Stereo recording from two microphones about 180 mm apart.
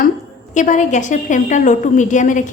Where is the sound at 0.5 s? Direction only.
45° left (ahead or behind).